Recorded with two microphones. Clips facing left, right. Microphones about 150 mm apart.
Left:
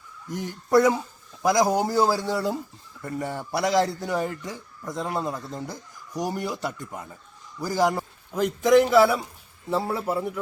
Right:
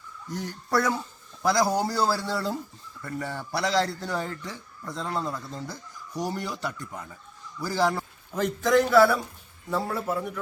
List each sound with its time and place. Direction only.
0.3 s speech: 20° left (ahead or behind)